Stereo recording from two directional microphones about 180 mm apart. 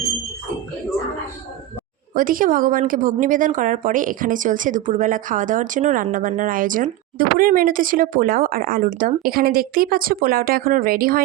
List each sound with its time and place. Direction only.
2.1 s a woman's voice: 50° right (ahead or behind)